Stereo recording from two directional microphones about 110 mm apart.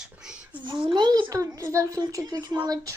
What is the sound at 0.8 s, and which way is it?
Speech, 45° right (ahead or behind).